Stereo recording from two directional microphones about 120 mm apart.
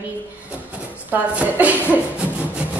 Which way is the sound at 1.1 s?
10° right (ahead or behind).